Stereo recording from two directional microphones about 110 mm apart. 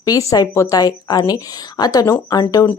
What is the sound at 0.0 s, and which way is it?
A woman's voice, 30° left (ahead or behind).